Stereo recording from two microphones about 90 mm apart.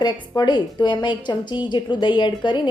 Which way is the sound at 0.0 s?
55° left (ahead or behind).